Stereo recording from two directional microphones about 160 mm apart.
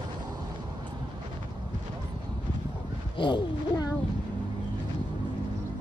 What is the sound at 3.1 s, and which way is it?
Speech, 30° left (ahead or behind).